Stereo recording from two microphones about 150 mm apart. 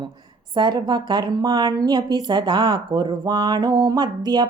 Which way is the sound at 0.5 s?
30° right (ahead or behind).